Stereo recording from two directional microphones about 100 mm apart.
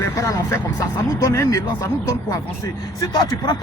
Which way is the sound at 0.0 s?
30° left (ahead or behind).